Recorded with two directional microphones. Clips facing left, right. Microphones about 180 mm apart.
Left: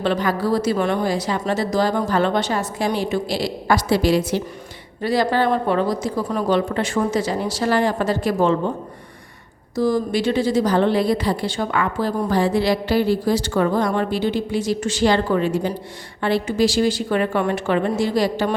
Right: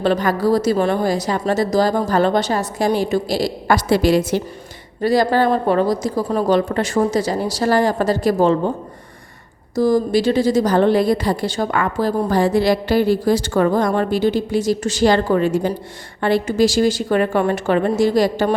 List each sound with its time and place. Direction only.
0.0 s a woman's voice: 40° right (ahead or behind)
9.7 s a woman's voice: 45° right (ahead or behind)